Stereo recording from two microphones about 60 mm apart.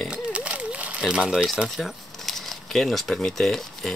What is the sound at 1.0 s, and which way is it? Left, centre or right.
Speech, centre.